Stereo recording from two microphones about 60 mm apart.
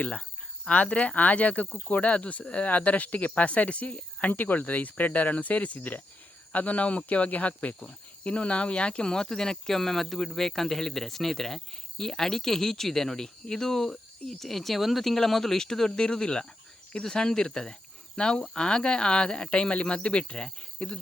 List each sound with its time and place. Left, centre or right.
0.0 s speech: left